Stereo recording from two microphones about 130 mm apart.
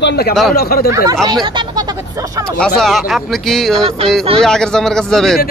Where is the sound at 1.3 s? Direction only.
35° right (ahead or behind).